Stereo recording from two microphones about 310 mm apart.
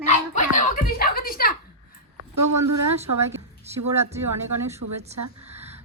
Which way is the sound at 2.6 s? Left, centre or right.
Right.